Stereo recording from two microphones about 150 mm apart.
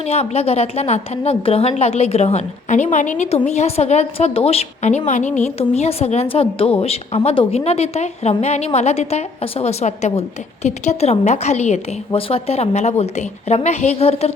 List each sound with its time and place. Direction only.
0.0 s a woman's voice: 45° left (ahead or behind)